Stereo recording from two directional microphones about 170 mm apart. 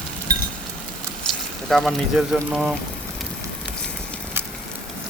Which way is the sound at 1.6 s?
Centre (ahead or behind).